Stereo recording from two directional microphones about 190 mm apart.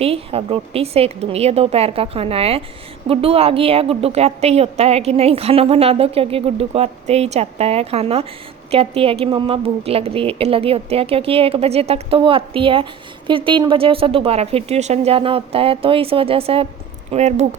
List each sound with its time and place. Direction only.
0.0 s a woman's voice: 30° right (ahead or behind)